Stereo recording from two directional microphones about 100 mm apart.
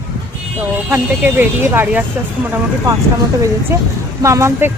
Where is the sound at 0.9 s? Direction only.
20° right (ahead or behind).